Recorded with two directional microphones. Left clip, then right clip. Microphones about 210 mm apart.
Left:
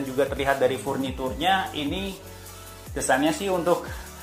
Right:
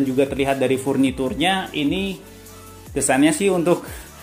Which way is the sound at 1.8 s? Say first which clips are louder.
Right 7 dB; centre (ahead or behind).